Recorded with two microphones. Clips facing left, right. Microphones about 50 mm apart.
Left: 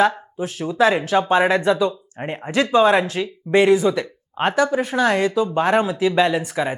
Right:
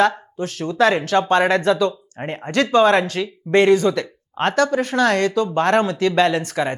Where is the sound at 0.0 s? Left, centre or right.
Centre.